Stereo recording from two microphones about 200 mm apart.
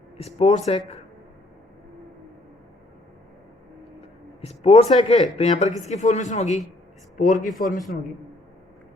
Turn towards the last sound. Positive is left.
turn(degrees=40)  # may be behind; listen again after turning